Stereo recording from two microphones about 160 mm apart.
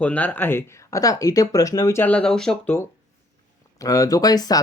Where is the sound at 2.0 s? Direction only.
10° left (ahead or behind).